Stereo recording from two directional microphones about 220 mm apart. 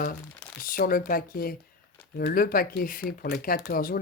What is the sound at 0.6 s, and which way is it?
Speech, 40° left (ahead or behind).